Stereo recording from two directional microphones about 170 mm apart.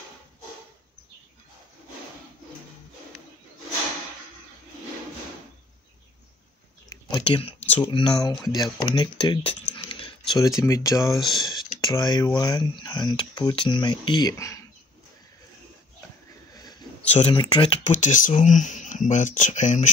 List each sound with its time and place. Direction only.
7.1 s speech: 30° left (ahead or behind)
11.1 s speech: centre (ahead or behind)
11.4 s speech: 25° left (ahead or behind)
16.5 s a sound: 25° left (ahead or behind)
17.1 s speech: 30° left (ahead or behind)
17.8 s speech: 45° left (ahead or behind)